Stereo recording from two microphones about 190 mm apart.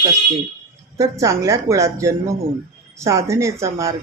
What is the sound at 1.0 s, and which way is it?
Speech, 15° right (ahead or behind).